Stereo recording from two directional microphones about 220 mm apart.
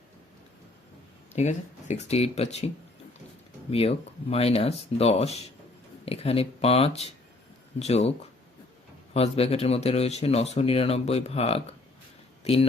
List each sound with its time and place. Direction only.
1.4 s speech: 30° left (ahead or behind)
3.7 s speech: 25° left (ahead or behind)
9.1 s speech: 25° left (ahead or behind)